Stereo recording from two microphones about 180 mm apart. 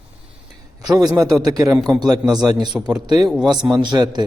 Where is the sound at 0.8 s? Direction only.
20° right (ahead or behind).